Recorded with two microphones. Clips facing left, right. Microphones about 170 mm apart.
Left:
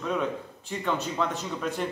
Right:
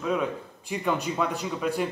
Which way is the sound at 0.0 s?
5° right (ahead or behind).